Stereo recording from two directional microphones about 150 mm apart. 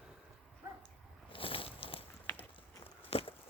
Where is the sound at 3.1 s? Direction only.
40° left (ahead or behind).